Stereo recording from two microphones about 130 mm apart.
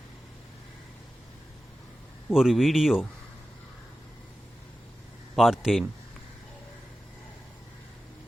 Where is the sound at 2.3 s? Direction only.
5° right (ahead or behind).